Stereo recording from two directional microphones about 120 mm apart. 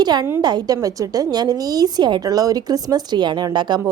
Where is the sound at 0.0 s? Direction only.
35° right (ahead or behind).